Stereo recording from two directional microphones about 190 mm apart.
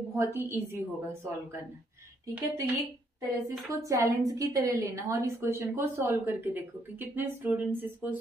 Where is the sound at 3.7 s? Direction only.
15° right (ahead or behind).